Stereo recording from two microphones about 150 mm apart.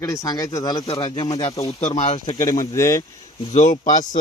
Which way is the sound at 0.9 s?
40° left (ahead or behind).